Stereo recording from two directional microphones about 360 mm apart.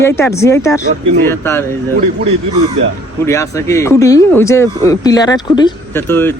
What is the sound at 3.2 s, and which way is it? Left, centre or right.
Speech, centre.